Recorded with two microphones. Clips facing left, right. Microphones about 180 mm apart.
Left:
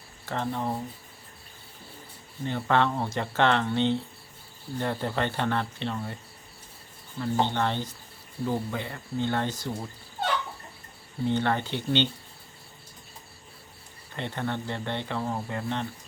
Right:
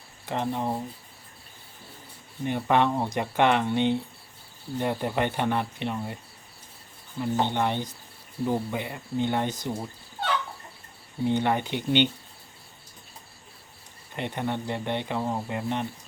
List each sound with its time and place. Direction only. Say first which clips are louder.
0.3 s speech: right 2 dB; 15° right (ahead or behind)
2.4 s speech: right 2 dB; 15° right (ahead or behind)
7.2 s speech: right 1 dB; 15° right (ahead or behind)
11.3 s speech: right 1 dB; 15° right (ahead or behind)
14.2 s speech: right 2 dB; 15° right (ahead or behind)